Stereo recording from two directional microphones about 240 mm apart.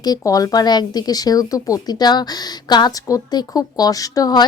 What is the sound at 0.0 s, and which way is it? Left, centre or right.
Speech, centre.